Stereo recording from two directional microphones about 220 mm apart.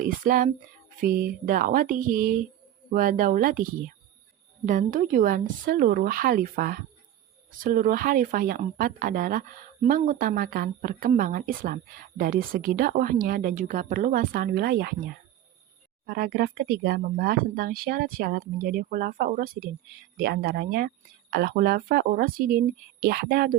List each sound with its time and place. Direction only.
0.0 s speech: 40° right (ahead or behind)
16.0 s speech: 45° right (ahead or behind)